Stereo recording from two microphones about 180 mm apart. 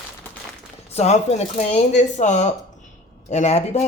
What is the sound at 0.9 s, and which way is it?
Speech, 35° left (ahead or behind).